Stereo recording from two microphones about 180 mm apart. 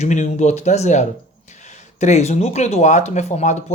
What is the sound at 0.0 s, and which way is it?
Speech, 40° left (ahead or behind).